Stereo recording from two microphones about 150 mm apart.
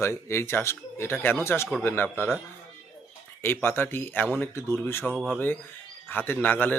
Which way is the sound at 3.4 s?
15° left (ahead or behind).